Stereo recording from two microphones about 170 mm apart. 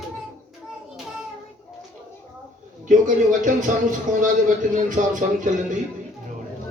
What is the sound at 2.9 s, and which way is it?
A man's voice, 50° right (ahead or behind).